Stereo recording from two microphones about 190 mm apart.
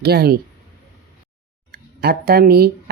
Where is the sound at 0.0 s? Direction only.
55° right (ahead or behind).